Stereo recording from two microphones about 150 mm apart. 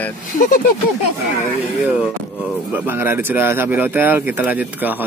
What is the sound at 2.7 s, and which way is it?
Speech, 15° right (ahead or behind).